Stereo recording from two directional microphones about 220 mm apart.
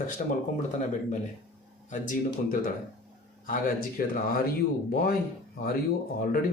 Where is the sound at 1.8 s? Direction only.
35° left (ahead or behind).